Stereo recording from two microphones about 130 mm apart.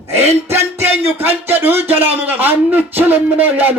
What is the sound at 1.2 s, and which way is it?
A man's voice, 15° right (ahead or behind).